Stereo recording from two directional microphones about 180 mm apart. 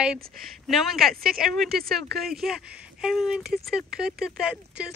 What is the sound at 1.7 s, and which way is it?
Speech, 60° right (ahead or behind).